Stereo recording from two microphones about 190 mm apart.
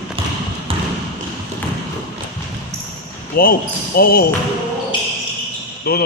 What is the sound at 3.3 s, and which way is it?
Speech, 50° left (ahead or behind).